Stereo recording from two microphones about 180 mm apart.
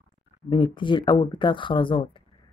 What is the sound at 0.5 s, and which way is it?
Speech, 25° left (ahead or behind).